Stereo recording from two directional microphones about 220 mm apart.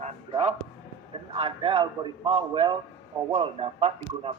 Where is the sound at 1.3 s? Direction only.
25° right (ahead or behind).